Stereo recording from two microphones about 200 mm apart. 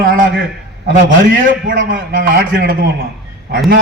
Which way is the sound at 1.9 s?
45° right (ahead or behind).